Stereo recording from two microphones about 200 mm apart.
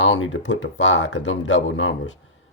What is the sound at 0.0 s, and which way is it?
Speech, 70° left (ahead or behind).